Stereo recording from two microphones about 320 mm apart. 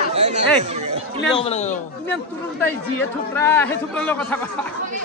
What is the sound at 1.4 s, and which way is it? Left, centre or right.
Speech, centre.